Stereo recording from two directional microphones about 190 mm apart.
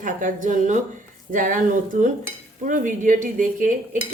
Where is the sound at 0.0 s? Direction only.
45° right (ahead or behind).